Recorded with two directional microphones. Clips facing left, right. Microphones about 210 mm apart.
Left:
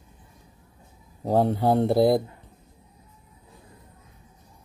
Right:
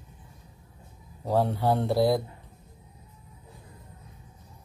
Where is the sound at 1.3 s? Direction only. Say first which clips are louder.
Left 4 dB; 50° left (ahead or behind).